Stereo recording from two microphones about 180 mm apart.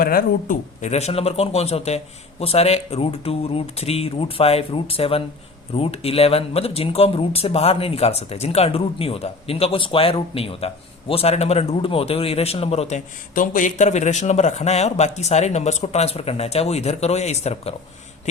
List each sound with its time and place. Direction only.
0.0 s speech: 55° left (ahead or behind); by 13.0 s 35° left (ahead or behind)
13.3 s speech: 50° left (ahead or behind)